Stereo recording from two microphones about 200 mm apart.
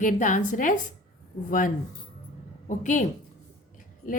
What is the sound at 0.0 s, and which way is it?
A woman's voice, 40° left (ahead or behind).